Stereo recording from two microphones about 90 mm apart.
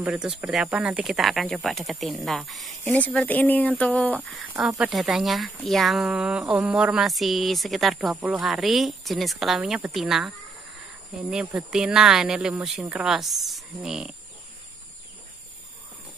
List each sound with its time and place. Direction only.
0.0 s speech: 10° right (ahead or behind)
2.8 s speech: 15° left (ahead or behind)
4.6 s speech: 5° right (ahead or behind)